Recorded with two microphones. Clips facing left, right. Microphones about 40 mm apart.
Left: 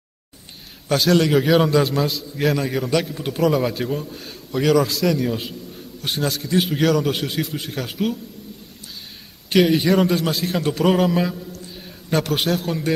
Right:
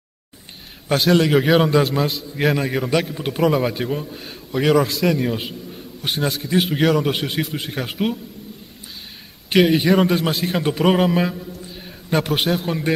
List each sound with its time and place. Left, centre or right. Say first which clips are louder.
0.8 s a man's voice: right 1 dB; centre
9.5 s a man's voice: right 1 dB; centre